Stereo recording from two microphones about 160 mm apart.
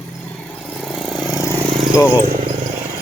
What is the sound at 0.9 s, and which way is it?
Vehicle, centre (ahead or behind).